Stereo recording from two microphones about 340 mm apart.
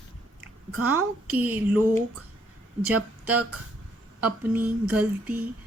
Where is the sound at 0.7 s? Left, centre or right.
Right.